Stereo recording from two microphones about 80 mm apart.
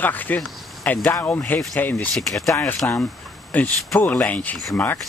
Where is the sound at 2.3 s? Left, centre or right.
Centre.